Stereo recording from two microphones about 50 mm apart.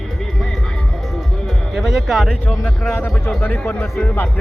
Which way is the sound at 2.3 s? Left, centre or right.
Left.